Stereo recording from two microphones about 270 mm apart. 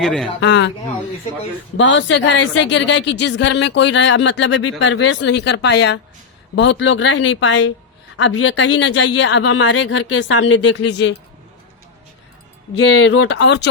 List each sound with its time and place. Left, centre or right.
0.0 s speech: centre
0.3 s a woman's voice: left
1.7 s a woman's voice: left
12.7 s speech: left